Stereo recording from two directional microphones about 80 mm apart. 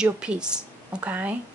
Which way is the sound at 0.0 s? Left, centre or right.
Centre.